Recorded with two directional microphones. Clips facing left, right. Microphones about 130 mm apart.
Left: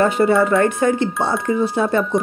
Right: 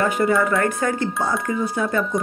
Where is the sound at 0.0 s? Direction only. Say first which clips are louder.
Left 4 dB; 30° left (ahead or behind).